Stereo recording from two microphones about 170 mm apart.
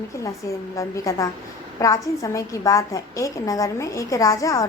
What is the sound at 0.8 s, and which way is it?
A woman's voice, 20° left (ahead or behind).